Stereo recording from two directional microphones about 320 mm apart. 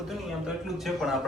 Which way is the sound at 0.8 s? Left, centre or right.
Centre.